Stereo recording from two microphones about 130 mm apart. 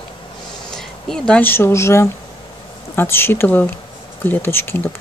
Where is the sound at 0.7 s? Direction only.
5° left (ahead or behind).